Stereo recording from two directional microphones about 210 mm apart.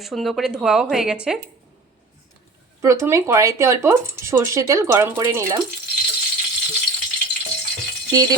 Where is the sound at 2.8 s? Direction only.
15° right (ahead or behind).